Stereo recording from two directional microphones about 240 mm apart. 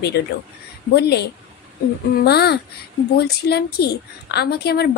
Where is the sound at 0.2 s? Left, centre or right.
Left.